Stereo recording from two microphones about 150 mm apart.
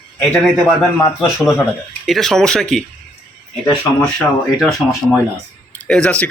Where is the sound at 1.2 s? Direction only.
5° right (ahead or behind).